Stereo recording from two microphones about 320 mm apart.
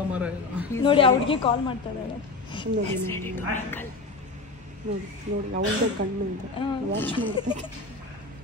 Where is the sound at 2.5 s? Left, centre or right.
Centre.